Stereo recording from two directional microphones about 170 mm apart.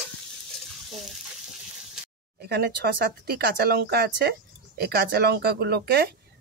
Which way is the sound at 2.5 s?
75° right (ahead or behind).